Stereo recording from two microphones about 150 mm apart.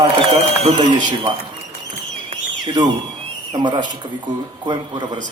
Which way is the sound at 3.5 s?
30° right (ahead or behind).